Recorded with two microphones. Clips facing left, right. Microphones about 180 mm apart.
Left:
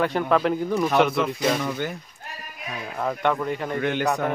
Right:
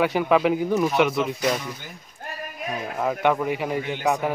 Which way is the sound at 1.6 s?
70° left (ahead or behind).